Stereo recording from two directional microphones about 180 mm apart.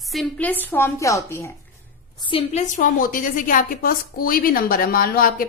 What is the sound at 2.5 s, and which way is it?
A woman's voice, 40° left (ahead or behind).